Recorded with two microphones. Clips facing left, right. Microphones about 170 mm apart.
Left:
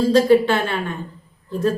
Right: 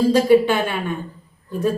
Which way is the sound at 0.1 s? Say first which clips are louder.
Left 2 dB; 10° right (ahead or behind).